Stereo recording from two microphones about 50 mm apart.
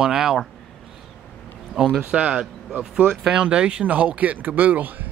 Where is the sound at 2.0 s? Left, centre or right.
Centre; by 5.1 s right.